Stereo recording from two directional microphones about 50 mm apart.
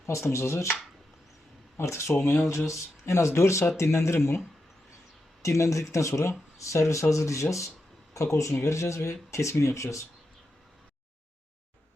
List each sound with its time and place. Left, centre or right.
0.0 s speech: left
1.8 s speech: left
2.1 s speech: left
2.5 s speech: left
5.4 s speech: left